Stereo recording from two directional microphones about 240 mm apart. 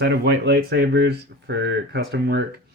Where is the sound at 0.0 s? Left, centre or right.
Right.